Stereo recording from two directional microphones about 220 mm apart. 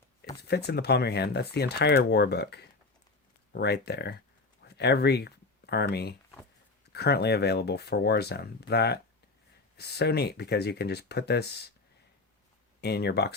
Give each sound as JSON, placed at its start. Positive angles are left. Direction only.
{"t": 0.4, "sound": "speech", "side_deg": 50}
{"t": 12.8, "sound": "speech", "side_deg": 50}